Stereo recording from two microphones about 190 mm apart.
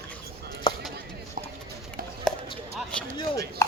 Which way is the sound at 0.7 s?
25° left (ahead or behind).